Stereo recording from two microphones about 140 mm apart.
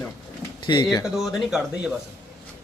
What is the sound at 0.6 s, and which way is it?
Speech, 35° left (ahead or behind).